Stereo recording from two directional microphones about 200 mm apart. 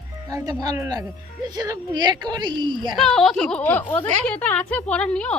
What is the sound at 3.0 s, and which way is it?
Speech, centre (ahead or behind).